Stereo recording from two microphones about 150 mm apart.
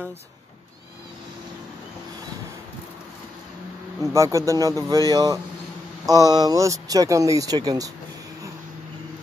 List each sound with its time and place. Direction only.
4.1 s speech: 20° right (ahead or behind)